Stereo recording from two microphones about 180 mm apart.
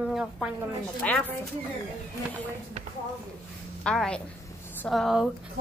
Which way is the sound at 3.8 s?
5° left (ahead or behind).